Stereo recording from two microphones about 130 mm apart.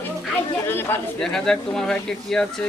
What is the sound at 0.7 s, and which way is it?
Speech, 15° left (ahead or behind).